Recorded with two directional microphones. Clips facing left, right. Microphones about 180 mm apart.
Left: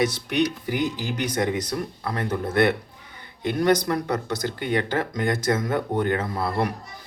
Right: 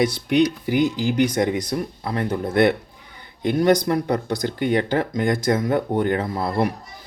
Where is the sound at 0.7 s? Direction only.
10° right (ahead or behind).